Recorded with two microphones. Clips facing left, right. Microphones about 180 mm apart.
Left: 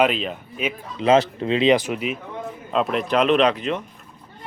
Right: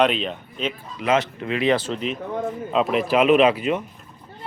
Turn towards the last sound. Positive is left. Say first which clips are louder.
# right 2 dB
turn(degrees=-10)  # may be behind; listen again after turning